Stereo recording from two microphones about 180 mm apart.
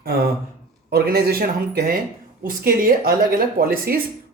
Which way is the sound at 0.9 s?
60° right (ahead or behind).